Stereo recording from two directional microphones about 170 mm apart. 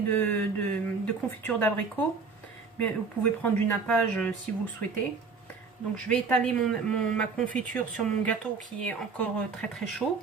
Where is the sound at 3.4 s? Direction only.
10° left (ahead or behind).